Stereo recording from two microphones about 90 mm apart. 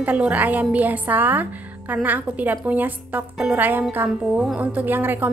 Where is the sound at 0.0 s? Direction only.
15° right (ahead or behind).